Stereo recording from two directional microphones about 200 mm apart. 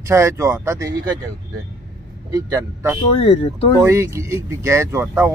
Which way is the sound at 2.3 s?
15° right (ahead or behind).